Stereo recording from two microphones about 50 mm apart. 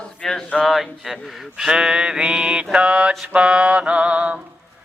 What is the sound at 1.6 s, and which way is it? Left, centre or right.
Mantra, centre.